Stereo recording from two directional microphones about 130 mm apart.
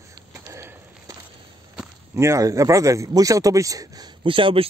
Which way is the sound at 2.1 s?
20° right (ahead or behind).